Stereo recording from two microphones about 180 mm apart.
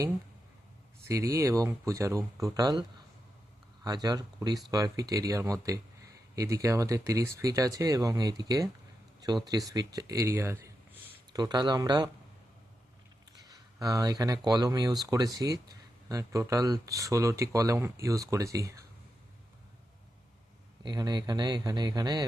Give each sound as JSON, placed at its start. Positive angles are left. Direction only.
{"t": 1.0, "sound": "speech", "side_deg": -15}
{"t": 3.8, "sound": "speech", "side_deg": -20}
{"t": 13.5, "sound": "speech", "side_deg": -20}
{"t": 20.8, "sound": "speech", "side_deg": -25}